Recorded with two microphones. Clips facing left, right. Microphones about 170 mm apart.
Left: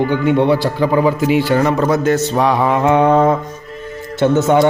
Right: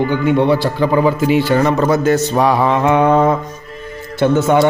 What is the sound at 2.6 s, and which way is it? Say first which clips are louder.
A man's voice: even; 20° left (ahead or behind).